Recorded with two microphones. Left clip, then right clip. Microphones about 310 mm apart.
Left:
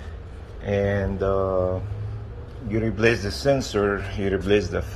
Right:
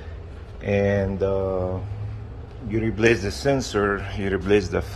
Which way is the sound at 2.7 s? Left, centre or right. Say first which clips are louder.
Right 1 dB; centre.